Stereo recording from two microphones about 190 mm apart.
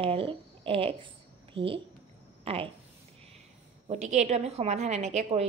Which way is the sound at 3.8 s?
35° right (ahead or behind).